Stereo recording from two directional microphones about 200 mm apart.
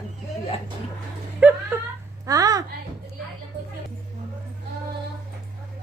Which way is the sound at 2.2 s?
15° right (ahead or behind).